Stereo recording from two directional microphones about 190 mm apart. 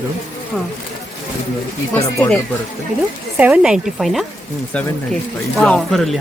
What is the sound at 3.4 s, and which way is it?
Speech, 5° right (ahead or behind).